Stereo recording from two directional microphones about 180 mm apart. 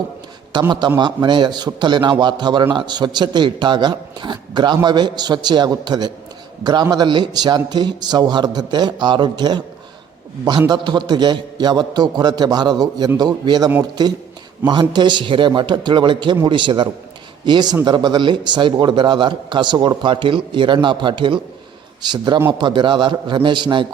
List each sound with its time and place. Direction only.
0.5 s a man's voice: 25° right (ahead or behind)
10.7 s a man's voice: 25° right (ahead or behind)
14.7 s a man's voice: 25° right (ahead or behind)